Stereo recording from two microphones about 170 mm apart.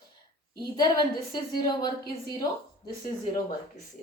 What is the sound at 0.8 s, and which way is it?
A woman's voice, 25° left (ahead or behind).